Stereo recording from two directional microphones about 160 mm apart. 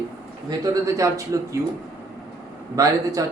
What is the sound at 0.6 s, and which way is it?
Speech, 20° right (ahead or behind).